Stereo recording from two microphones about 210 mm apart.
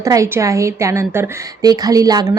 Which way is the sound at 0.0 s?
15° right (ahead or behind).